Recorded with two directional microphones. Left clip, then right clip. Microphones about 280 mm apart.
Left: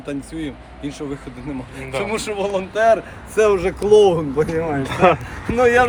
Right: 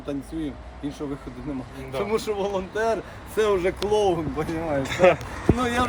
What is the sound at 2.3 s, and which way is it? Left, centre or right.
Speech, centre.